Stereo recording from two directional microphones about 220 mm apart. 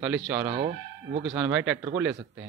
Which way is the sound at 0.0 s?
5° right (ahead or behind).